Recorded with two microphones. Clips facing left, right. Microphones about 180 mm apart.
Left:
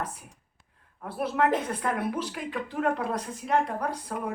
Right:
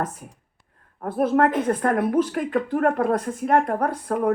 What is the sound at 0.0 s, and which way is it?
A woman's voice, 50° right (ahead or behind).